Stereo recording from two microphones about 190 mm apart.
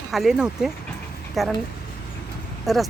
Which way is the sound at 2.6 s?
Centre (ahead or behind).